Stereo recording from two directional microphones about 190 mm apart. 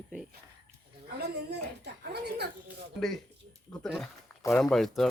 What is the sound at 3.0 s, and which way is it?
Speech, centre (ahead or behind).